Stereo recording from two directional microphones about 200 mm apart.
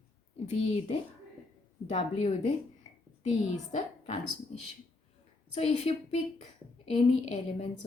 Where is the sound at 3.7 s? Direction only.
30° left (ahead or behind).